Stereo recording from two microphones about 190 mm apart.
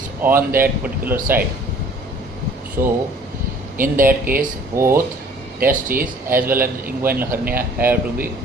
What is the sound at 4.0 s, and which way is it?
Speech, 50° right (ahead or behind).